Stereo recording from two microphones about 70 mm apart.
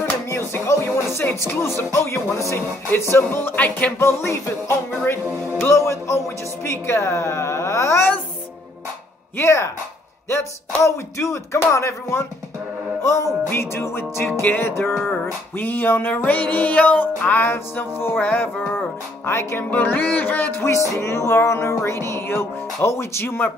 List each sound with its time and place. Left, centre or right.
0.3 s music: left
3.3 s music: left
4.0 s music: left
9.4 s a sound: left
13.0 s music: left
21.0 s music: left